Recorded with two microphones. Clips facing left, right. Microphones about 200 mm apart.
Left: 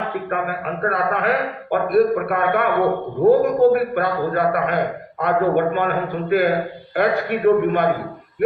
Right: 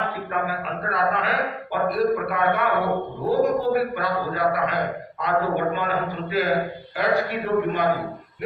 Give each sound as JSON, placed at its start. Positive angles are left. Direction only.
{"t": 0.3, "sound": "a man's voice", "side_deg": 55}